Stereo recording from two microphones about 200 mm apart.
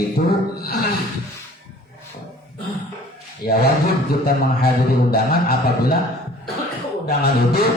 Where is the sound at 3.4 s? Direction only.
50° left (ahead or behind).